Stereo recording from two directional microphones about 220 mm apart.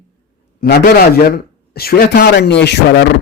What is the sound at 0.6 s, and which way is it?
A man's voice, 45° left (ahead or behind).